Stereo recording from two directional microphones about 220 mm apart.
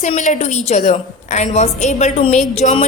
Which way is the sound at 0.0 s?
35° left (ahead or behind).